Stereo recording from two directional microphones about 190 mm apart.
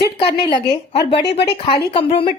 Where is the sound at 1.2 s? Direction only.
60° left (ahead or behind).